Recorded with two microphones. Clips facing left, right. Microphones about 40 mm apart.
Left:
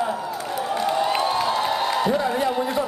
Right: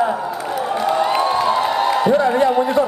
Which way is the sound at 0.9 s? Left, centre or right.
Centre.